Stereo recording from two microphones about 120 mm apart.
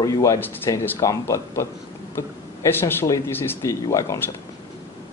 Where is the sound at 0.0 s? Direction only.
30° left (ahead or behind).